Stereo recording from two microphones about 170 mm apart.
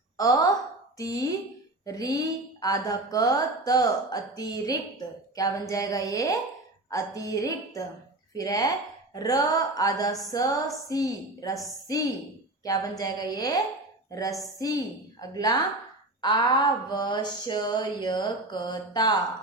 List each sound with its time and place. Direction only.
0.2 s sigh: 20° left (ahead or behind)
0.9 s speech: 20° left (ahead or behind)